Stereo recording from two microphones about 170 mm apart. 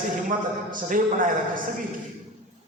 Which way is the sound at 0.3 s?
50° right (ahead or behind).